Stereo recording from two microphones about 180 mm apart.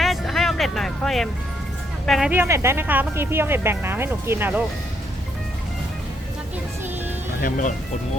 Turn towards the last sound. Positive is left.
turn(degrees=50)  # may be behind; listen again after turning